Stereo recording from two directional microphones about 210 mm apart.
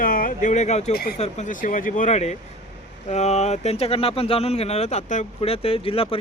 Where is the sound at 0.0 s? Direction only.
40° left (ahead or behind).